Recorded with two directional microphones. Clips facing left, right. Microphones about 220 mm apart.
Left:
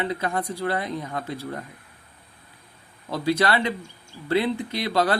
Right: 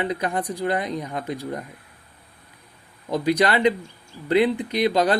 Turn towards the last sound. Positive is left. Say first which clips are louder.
# right 3 dB
turn(degrees=-15)  # may be behind; listen again after turning